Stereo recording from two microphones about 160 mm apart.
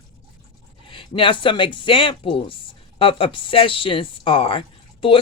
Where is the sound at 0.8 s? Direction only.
30° left (ahead or behind).